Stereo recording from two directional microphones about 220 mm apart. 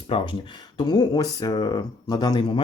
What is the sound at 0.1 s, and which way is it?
Speech, 25° left (ahead or behind).